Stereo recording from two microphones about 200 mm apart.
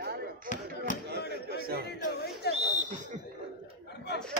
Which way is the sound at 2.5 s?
55° left (ahead or behind).